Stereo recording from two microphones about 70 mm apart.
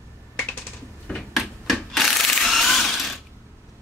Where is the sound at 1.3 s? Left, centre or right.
Centre.